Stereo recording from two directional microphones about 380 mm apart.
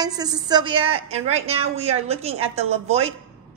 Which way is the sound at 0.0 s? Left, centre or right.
Centre.